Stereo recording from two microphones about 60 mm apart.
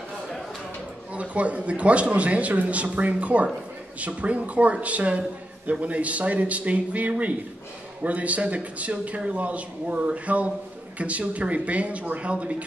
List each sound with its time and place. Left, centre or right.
1.1 s a man's voice: right